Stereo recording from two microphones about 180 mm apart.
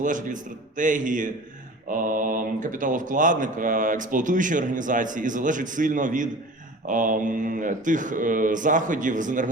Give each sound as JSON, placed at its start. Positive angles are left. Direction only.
{"t": 0.0, "sound": "speech", "side_deg": -45}